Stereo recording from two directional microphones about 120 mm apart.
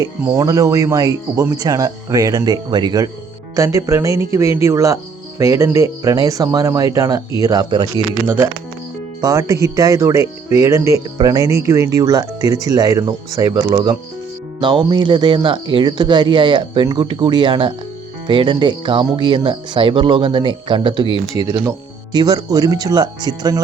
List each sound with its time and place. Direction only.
0.0 s speech: 25° right (ahead or behind)
9.2 s speech: 25° right (ahead or behind)